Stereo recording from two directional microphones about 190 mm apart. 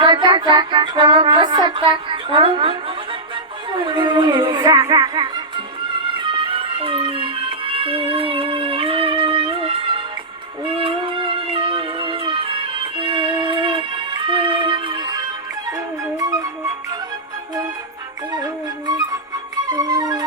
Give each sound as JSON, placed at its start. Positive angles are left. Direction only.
{"t": 0.0, "sound": "music", "side_deg": -25}
{"t": 3.8, "sound": "speech", "side_deg": -25}
{"t": 6.1, "sound": "music", "side_deg": -25}
{"t": 18.9, "sound": "music", "side_deg": -20}